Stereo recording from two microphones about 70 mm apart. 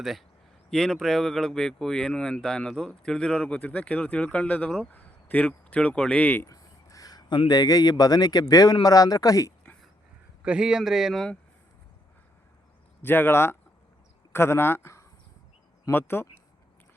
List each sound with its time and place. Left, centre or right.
0.0 s speech: centre; by 6.4 s left
6.5 s speech: left
10.4 s speech: centre
13.0 s speech: left